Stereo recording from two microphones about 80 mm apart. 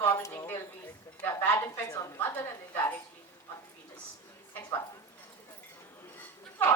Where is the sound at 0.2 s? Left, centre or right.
Left.